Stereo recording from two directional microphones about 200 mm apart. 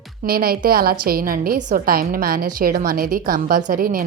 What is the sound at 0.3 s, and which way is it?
A woman's voice, 50° right (ahead or behind).